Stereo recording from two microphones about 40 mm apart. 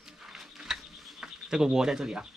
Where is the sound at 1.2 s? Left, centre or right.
Centre.